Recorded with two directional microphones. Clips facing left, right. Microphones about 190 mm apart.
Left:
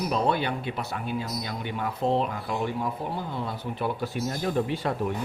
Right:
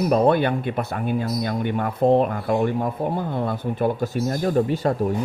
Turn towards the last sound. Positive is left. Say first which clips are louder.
# right 6 dB
turn(degrees=-40)  # may be behind; listen again after turning